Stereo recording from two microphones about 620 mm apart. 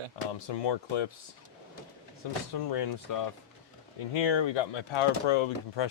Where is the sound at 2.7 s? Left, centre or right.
Left.